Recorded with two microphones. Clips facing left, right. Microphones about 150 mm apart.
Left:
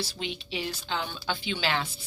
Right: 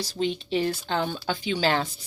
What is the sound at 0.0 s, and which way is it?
A woman's voice, 45° right (ahead or behind).